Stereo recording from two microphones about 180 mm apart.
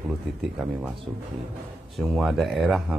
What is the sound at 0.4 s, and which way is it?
Speech, 5° right (ahead or behind).